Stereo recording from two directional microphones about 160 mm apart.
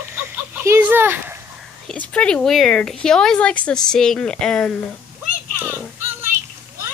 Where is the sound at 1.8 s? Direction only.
5° left (ahead or behind).